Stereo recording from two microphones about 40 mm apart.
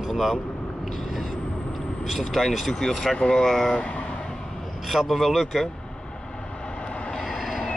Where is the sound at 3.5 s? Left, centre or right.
Centre.